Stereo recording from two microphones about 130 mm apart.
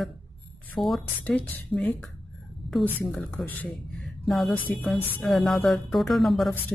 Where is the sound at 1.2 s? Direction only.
10° left (ahead or behind).